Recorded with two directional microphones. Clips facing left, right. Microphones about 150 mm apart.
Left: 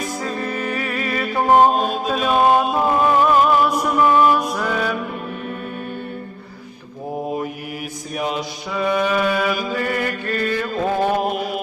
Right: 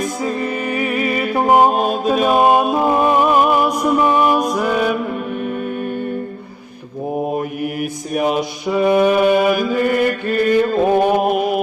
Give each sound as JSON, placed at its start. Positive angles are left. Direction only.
{"t": 0.2, "sound": "music", "side_deg": -15}
{"t": 1.9, "sound": "music", "side_deg": -55}
{"t": 2.3, "sound": "music", "side_deg": -15}
{"t": 4.6, "sound": "mantra", "side_deg": -15}
{"t": 7.6, "sound": "mantra", "side_deg": -55}
{"t": 8.7, "sound": "mantra", "side_deg": -10}
{"t": 9.4, "sound": "chant", "side_deg": -55}
{"t": 9.8, "sound": "mantra", "side_deg": -20}
{"t": 11.3, "sound": "mantra", "side_deg": -55}